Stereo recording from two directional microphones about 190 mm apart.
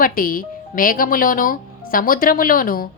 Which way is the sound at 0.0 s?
50° left (ahead or behind).